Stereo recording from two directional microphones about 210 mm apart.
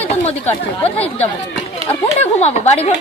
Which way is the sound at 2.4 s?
30° left (ahead or behind).